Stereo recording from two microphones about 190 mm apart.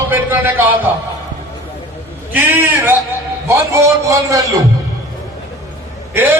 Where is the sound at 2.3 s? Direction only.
10° right (ahead or behind).